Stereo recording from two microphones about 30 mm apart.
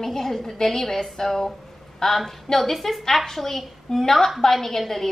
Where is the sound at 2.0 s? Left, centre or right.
Centre.